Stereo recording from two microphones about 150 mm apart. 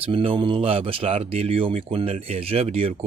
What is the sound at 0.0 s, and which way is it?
Speech, 40° right (ahead or behind).